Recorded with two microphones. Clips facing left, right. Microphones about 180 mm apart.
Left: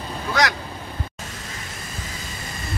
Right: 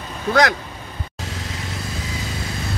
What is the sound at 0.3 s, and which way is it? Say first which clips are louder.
Speech: right 5 dB; 50° right (ahead or behind).